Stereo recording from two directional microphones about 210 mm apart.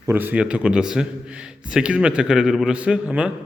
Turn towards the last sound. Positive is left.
turn(degrees=-5)  # may be behind; listen again after turning